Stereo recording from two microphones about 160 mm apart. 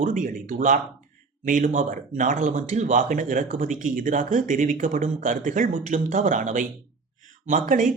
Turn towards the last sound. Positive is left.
turn(degrees=-55)  # may be behind; listen again after turning